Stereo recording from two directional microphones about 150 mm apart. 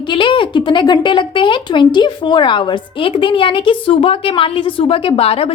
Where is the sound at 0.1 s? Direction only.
35° left (ahead or behind).